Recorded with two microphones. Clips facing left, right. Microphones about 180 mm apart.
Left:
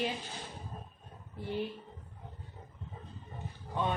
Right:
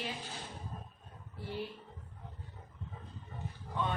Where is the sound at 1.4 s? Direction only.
20° left (ahead or behind).